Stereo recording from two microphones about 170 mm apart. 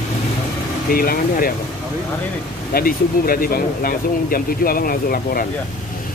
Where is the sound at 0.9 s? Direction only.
60° left (ahead or behind).